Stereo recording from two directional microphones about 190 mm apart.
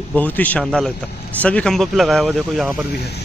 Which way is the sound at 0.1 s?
10° left (ahead or behind).